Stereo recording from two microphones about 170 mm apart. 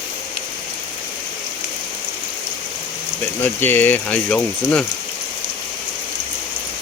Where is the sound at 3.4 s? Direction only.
10° left (ahead or behind).